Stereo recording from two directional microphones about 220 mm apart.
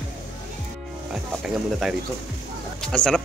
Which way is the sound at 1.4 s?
Centre (ahead or behind).